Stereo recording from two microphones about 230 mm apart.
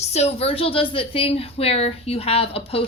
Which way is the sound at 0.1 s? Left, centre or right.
Left.